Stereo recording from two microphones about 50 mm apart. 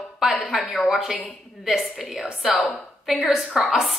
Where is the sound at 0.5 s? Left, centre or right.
Centre.